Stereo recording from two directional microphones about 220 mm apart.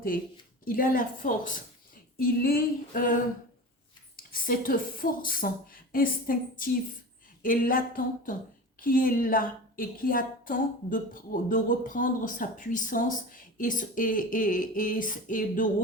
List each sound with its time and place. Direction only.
0.6 s a woman's voice: 40° left (ahead or behind)
4.2 s a woman's voice: 40° left (ahead or behind)